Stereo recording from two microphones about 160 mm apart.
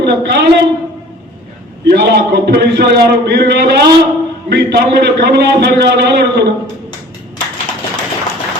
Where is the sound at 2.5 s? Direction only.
90° right.